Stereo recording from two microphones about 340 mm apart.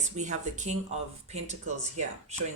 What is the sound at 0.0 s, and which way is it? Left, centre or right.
Speech, right.